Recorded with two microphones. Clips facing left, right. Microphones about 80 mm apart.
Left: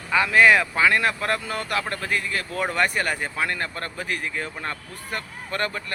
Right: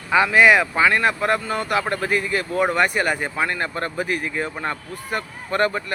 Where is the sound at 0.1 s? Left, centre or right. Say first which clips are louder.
Right 2 dB; centre.